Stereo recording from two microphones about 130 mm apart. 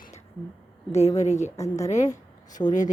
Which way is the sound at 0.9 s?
55° left (ahead or behind).